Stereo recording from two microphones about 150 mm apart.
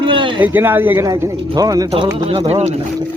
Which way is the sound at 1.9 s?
45° right (ahead or behind).